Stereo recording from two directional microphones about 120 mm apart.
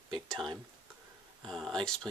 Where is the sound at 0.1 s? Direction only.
5° left (ahead or behind).